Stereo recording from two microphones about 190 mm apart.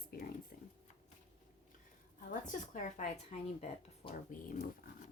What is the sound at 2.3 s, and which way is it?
Speech, 40° left (ahead or behind).